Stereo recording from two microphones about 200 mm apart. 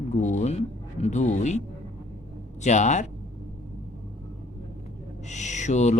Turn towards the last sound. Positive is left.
turn(degrees=35)  # may be behind; listen again after turning